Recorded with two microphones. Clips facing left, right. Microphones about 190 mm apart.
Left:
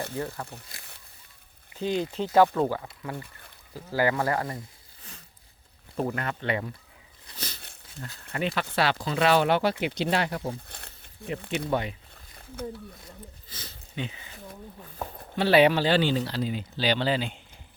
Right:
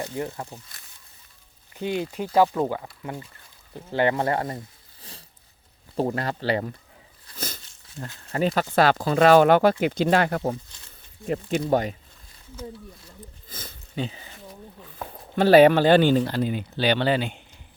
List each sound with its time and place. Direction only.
0.0 s speech: 20° right (ahead or behind)
1.8 s speech: 10° right (ahead or behind); by 6.7 s 35° right (ahead or behind)
7.3 s a sound: 45° right (ahead or behind)
8.3 s speech: 40° right (ahead or behind)
10.7 s a sound: 60° left (ahead or behind)
11.4 s speech: 60° left (ahead or behind)
11.7 s speech: 40° right (ahead or behind)
13.5 s a sound: 50° right (ahead or behind)
13.9 s speech: 35° right (ahead or behind)
15.4 s speech: 45° right (ahead or behind); by 17.4 s 60° right (ahead or behind)